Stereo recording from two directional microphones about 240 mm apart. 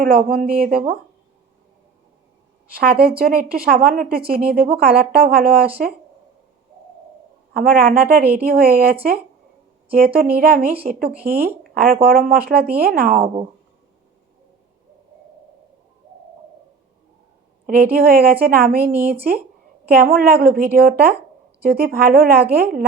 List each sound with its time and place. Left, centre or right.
0.0 s speech: right
2.7 s speech: right
7.5 s speech: right
17.7 s speech: right